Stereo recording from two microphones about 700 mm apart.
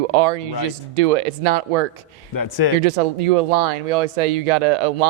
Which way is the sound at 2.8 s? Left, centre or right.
Right.